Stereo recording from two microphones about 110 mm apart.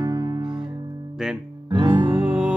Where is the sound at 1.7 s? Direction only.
40° right (ahead or behind).